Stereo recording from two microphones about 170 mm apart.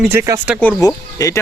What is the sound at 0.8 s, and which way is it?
Speech, 20° left (ahead or behind).